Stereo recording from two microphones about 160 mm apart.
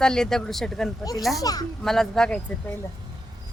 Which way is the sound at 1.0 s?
25° left (ahead or behind).